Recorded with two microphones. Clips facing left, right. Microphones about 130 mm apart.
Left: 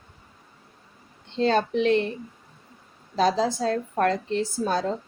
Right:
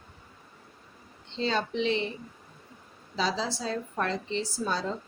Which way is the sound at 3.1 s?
50° left (ahead or behind).